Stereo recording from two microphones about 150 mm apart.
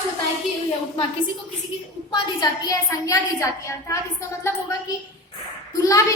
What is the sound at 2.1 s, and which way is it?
A woman's voice, 25° left (ahead or behind).